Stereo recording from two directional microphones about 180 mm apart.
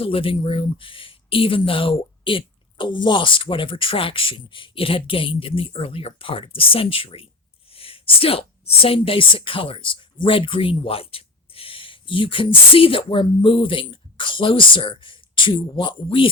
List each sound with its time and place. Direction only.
0.0 s speech: 30° left (ahead or behind)